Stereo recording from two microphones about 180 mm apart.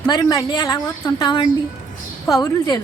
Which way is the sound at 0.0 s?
20° left (ahead or behind).